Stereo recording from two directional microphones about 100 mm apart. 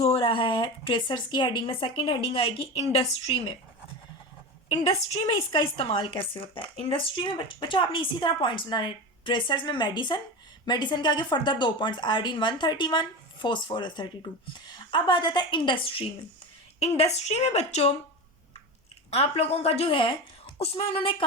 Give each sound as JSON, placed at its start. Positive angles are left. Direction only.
{"t": 0.0, "sound": "speech", "side_deg": 65}
{"t": 5.2, "sound": "a woman's voice", "side_deg": 60}
{"t": 16.8, "sound": "a woman's voice", "side_deg": 90}
{"t": 19.1, "sound": "a woman's voice", "side_deg": 90}